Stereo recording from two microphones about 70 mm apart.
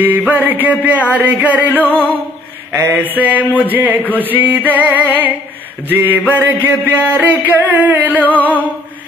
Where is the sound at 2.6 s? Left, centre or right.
Right.